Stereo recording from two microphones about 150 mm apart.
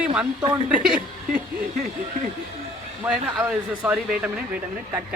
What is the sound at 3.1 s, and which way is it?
Speech, 5° right (ahead or behind).